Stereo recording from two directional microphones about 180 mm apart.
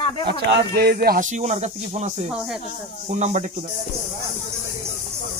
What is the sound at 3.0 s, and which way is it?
Speech, 40° right (ahead or behind).